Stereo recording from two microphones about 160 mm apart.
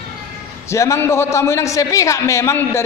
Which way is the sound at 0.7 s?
20° left (ahead or behind).